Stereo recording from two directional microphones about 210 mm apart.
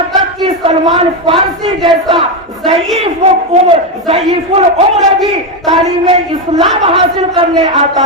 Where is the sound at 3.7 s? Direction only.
30° right (ahead or behind).